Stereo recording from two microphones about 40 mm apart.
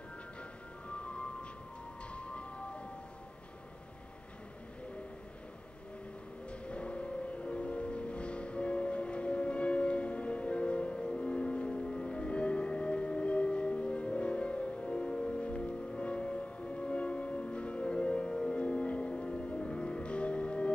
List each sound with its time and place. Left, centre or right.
0.8 s music: left
6.5 s music: left